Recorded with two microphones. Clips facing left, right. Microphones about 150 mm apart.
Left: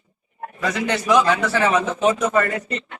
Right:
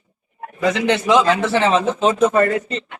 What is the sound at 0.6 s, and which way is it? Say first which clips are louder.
A man's voice: right 5 dB; 25° right (ahead or behind).